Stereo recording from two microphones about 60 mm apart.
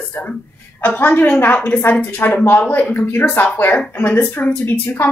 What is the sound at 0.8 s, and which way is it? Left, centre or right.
A woman's voice, left.